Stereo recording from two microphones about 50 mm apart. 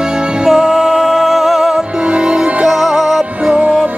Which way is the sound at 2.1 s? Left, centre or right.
Centre.